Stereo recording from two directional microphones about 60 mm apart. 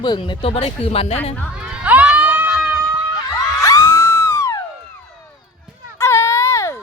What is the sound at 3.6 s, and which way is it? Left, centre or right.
Music, left.